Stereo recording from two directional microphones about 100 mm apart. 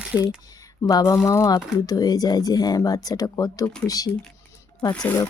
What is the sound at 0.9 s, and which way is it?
Speech, 30° left (ahead or behind).